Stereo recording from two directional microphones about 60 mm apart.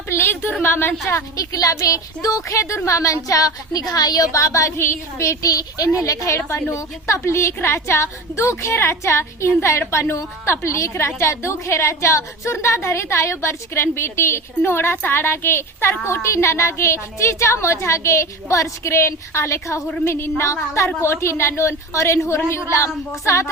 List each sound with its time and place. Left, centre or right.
0.6 s a woman's voice: left
1.1 s a woman's voice: left
6.1 s a woman's voice: left